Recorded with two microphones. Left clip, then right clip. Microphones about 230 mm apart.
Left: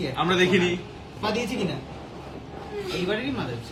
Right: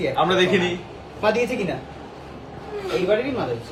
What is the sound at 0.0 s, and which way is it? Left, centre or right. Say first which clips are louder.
A woman's voice: right 4 dB; centre.